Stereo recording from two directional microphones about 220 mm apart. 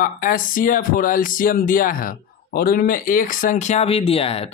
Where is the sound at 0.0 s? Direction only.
40° left (ahead or behind).